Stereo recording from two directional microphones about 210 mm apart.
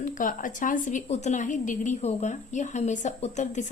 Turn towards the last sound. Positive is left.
turn(degrees=35)  # may be behind; listen again after turning